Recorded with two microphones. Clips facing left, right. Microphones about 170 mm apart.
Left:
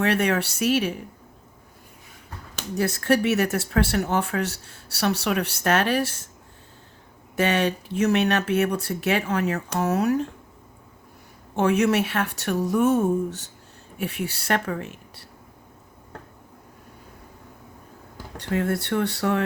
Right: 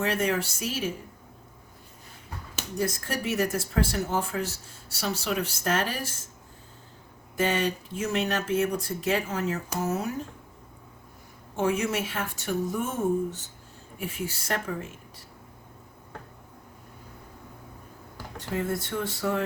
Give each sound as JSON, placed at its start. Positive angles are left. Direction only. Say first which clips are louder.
{"t": 0.0, "sound": "speech", "louder": "left 4 dB", "side_deg": 70}
{"t": 2.7, "sound": "speech", "louder": "left 8 dB", "side_deg": 75}
{"t": 7.3, "sound": "speech", "louder": "left 4 dB", "side_deg": 70}
{"t": 11.5, "sound": "speech", "louder": "left 6 dB", "side_deg": 75}
{"t": 18.3, "sound": "speech", "louder": "left 5 dB", "side_deg": 70}